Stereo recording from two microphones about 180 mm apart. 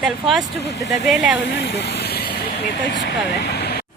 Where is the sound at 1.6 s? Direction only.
65° left (ahead or behind).